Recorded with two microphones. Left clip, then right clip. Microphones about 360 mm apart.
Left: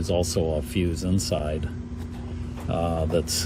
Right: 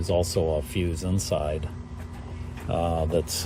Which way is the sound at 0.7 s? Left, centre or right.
Centre.